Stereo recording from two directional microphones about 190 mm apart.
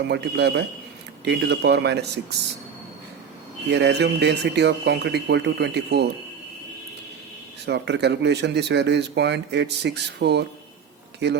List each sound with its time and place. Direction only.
0.1 s speech: 65° right (ahead or behind)
3.7 s speech: 65° right (ahead or behind)
7.6 s speech: 65° right (ahead or behind)